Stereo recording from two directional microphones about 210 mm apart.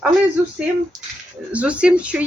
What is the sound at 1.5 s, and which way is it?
Speech, 5° right (ahead or behind).